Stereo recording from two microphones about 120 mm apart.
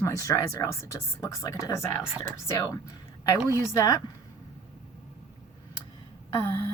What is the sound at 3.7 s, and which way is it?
Speech, 25° left (ahead or behind).